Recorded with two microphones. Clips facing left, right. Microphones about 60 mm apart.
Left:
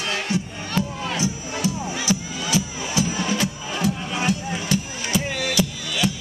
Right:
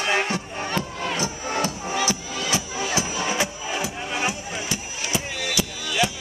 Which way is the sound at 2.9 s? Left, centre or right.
Right.